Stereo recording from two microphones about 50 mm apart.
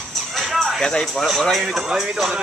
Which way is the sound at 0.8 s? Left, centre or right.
Centre.